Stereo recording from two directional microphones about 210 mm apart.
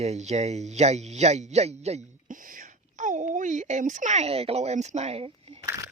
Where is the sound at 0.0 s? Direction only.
30° right (ahead or behind).